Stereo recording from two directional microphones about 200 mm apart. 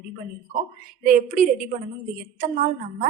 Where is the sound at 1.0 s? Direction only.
45° right (ahead or behind).